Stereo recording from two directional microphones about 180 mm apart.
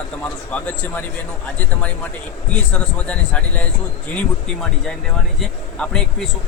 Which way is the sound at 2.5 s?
5° left (ahead or behind).